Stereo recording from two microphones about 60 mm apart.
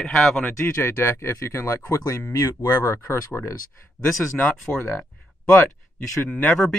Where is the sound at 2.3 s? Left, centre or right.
Left.